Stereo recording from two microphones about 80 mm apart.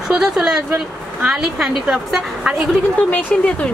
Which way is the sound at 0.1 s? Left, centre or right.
Centre.